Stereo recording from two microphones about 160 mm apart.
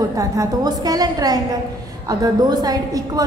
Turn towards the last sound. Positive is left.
turn(degrees=-25)  # may be behind; listen again after turning